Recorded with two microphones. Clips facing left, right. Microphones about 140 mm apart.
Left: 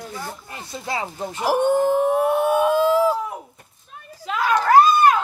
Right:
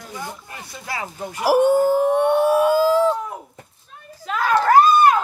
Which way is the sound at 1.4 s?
5° right (ahead or behind).